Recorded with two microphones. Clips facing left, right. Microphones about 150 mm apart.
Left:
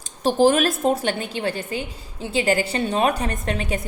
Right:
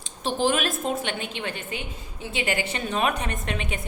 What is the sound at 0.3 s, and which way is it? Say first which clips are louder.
A woman's voice: left 7 dB; 40° left (ahead or behind).